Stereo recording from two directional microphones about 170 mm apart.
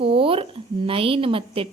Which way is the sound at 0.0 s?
30° right (ahead or behind).